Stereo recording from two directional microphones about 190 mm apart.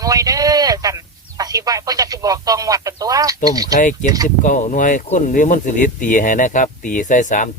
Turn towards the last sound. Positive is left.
turn(degrees=40)  # may be behind; listen again after turning